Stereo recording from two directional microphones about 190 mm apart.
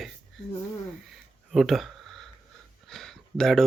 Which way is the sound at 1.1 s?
Centre (ahead or behind).